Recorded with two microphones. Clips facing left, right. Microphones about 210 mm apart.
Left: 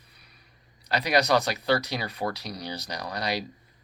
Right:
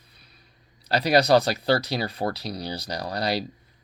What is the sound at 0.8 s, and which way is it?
Speech, 30° right (ahead or behind).